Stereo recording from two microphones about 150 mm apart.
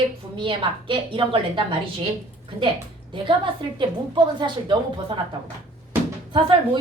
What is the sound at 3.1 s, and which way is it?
A woman's voice, 35° right (ahead or behind).